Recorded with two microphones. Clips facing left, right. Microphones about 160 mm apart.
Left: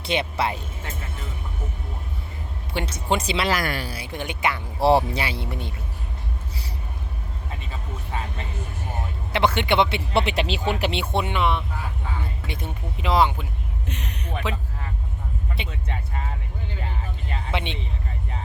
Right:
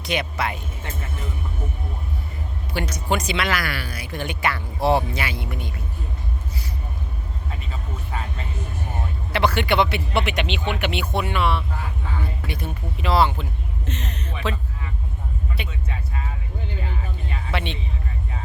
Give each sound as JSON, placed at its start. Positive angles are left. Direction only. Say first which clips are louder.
{"t": 0.0, "sound": "speech", "louder": "left 1 dB", "side_deg": 30}
{"t": 2.7, "sound": "speech", "louder": "even", "side_deg": 25}
{"t": 3.6, "sound": "speech", "louder": "left 2 dB", "side_deg": 45}
{"t": 3.8, "sound": "speech", "louder": "right 1 dB", "side_deg": 30}
{"t": 4.8, "sound": "speech", "louder": "left 2 dB", "side_deg": 35}
{"t": 9.3, "sound": "speech", "louder": "even", "side_deg": 20}
{"t": 15.6, "sound": "a sound", "louder": "even", "side_deg": 25}
{"t": 17.3, "sound": "a sound", "louder": "even", "side_deg": 20}